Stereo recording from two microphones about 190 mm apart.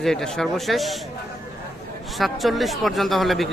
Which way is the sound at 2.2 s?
Centre (ahead or behind).